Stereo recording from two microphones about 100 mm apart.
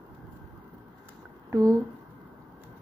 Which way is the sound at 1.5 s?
35° right (ahead or behind).